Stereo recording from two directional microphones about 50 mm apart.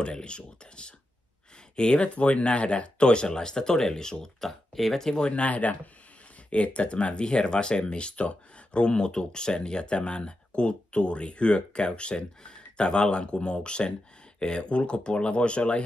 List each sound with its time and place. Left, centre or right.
0.0 s speech: centre